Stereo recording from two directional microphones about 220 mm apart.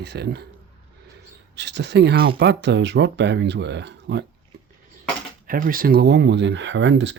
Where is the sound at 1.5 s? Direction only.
50° right (ahead or behind).